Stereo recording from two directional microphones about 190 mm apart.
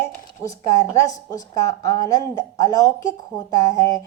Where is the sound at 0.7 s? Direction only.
15° left (ahead or behind).